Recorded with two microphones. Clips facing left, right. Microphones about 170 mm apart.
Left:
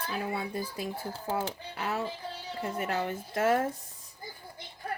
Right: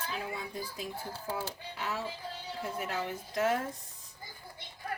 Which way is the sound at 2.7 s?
50° left (ahead or behind).